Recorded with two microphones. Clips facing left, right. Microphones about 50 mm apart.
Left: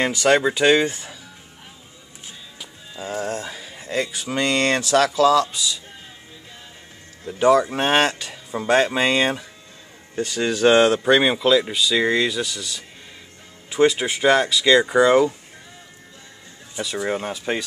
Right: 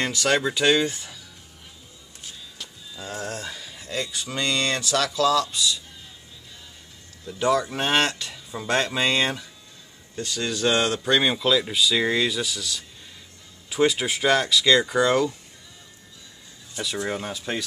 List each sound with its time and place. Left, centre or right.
0.0 s speech: centre
3.0 s speech: centre
4.3 s speech: left
7.2 s speech: left; by 15.2 s centre
16.8 s speech: centre
17.1 s speech: left